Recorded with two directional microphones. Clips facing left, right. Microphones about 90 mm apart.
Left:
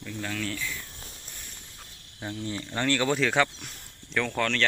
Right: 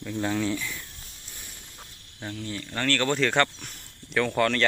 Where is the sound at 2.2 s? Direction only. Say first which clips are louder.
Left 1 dB; 20° left (ahead or behind).